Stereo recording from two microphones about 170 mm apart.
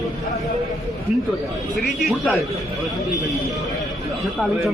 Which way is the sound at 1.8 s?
Centre (ahead or behind).